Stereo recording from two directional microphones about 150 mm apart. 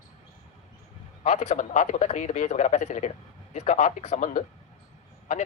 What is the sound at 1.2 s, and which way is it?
A man's voice, 50° left (ahead or behind).